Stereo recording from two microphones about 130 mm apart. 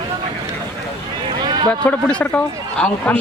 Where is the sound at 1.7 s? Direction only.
10° left (ahead or behind).